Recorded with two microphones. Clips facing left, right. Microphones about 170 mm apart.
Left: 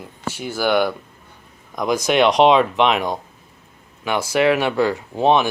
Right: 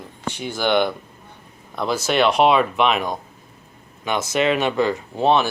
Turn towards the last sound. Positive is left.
turn(degrees=15)  # may be behind; listen again after turning